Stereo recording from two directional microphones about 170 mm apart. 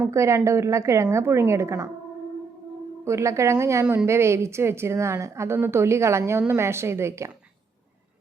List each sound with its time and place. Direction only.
0.0 s a woman's voice: 15° right (ahead or behind)
3.0 s a woman's voice: 15° right (ahead or behind)